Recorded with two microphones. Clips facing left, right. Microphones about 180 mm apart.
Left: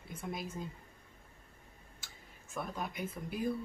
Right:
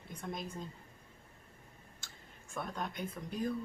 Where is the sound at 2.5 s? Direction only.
5° left (ahead or behind).